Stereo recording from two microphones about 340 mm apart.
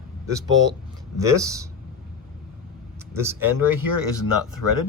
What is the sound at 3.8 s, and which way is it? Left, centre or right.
Speech, left.